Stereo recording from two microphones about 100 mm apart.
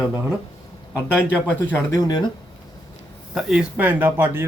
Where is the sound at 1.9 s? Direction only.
45° left (ahead or behind).